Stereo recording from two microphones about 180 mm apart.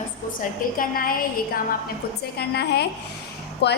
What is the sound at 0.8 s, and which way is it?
Speech, 55° left (ahead or behind).